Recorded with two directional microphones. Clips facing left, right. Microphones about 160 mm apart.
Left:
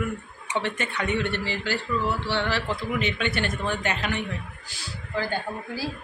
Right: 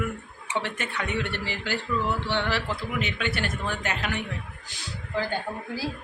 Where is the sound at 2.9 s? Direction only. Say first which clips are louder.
Left 2 dB; 5° right (ahead or behind).